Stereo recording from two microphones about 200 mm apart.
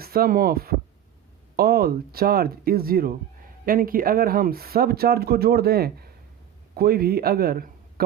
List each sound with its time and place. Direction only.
0.0 s speech: 50° right (ahead or behind)